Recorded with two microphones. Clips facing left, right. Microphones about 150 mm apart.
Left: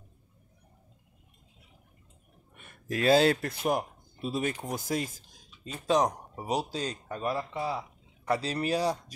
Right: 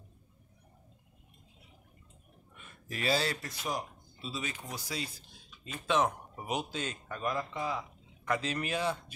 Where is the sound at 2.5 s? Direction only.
50° left (ahead or behind).